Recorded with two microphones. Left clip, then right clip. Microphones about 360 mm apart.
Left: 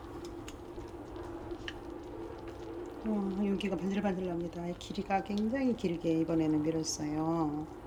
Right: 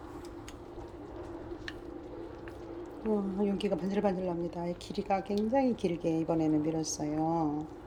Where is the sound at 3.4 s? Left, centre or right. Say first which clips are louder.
Right 2 dB; centre.